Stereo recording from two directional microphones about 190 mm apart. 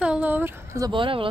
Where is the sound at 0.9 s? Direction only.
25° right (ahead or behind).